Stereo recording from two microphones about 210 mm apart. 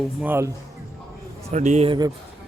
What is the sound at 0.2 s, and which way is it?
Speech, 10° right (ahead or behind).